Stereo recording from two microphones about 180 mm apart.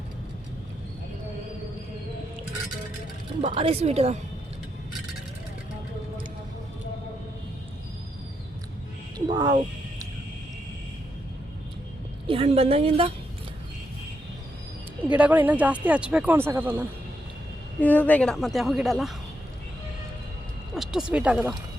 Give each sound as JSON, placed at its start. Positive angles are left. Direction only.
{"t": 3.4, "sound": "a woman's voice", "side_deg": -30}
{"t": 9.3, "sound": "a sound", "side_deg": -20}
{"t": 12.2, "sound": "a woman's voice", "side_deg": -30}
{"t": 15.1, "sound": "speech", "side_deg": -10}
{"t": 17.7, "sound": "a woman's voice", "side_deg": 10}
{"t": 20.7, "sound": "speech", "side_deg": -5}